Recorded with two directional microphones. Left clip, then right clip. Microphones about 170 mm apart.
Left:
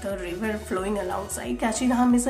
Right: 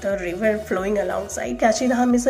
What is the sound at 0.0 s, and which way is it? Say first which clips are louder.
A woman's voice: right 8 dB; 20° right (ahead or behind).